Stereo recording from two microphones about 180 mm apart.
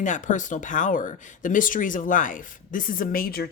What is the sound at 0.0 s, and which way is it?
Speech, 45° left (ahead or behind).